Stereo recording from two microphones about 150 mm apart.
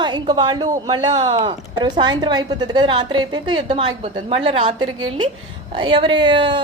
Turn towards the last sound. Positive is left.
turn(degrees=-30)  # may be behind; listen again after turning